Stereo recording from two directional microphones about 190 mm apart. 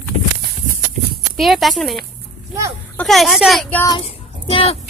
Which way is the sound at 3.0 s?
Centre (ahead or behind).